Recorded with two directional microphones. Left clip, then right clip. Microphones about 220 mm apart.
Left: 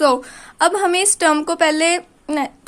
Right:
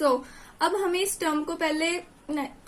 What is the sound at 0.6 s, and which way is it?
A woman's voice, 50° left (ahead or behind).